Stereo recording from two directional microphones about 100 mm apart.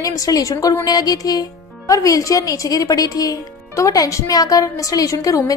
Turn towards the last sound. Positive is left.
turn(degrees=35)  # may be behind; listen again after turning